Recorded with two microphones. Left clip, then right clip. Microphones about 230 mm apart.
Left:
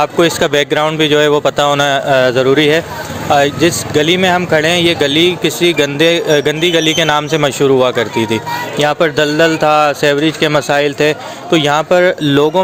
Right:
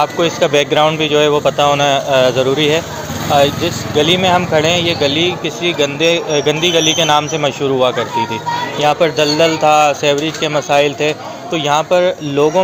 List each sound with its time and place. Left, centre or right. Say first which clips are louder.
0.0 s speech: left 2 dB; left